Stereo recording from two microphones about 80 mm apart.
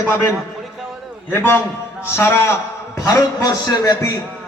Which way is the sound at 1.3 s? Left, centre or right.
Left.